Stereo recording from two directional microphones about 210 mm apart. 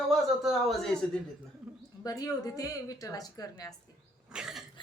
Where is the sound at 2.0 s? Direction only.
15° left (ahead or behind).